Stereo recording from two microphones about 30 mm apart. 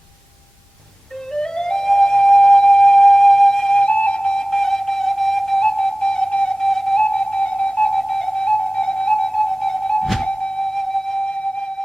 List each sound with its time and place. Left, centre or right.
1.3 s music: left
3.7 s flute: left
4.4 s flute: centre
5.5 s flute: left
6.6 s flute: centre
7.0 s music: left